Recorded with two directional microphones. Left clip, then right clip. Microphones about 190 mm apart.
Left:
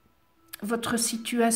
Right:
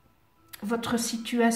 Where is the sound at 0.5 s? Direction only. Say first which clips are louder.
Even; 55° left (ahead or behind).